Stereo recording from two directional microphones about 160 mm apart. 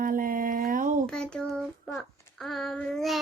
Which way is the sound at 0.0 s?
60° right (ahead or behind).